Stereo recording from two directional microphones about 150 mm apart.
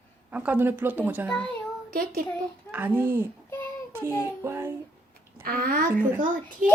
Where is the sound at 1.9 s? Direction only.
75° right (ahead or behind).